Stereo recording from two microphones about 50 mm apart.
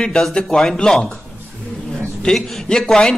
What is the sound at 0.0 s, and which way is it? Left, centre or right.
A man's voice, centre.